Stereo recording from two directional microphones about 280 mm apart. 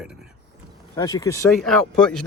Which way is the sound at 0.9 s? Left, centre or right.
Centre.